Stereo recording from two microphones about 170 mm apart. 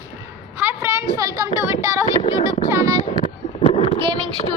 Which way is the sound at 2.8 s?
40° left (ahead or behind).